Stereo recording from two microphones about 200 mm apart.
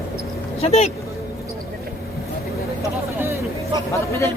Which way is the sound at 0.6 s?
30° left (ahead or behind).